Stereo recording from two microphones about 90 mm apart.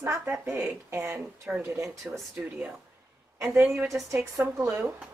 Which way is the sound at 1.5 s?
15° right (ahead or behind).